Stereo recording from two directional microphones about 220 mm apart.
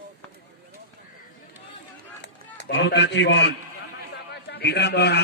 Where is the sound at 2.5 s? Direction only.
55° left (ahead or behind).